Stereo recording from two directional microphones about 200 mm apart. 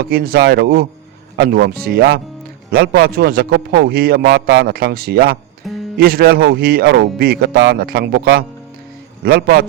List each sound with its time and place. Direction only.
0.0 s a man's voice: 50° right (ahead or behind)
5.6 s music: centre (ahead or behind)
6.0 s a man's voice: 50° right (ahead or behind)